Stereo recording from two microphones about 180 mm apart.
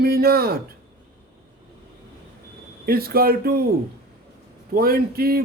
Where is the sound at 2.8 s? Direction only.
55° right (ahead or behind).